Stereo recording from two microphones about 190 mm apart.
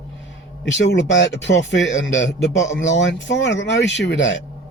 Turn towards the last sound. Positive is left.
turn(degrees=75)  # may be behind; listen again after turning